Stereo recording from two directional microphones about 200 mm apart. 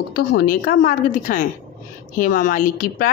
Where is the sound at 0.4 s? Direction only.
45° left (ahead or behind).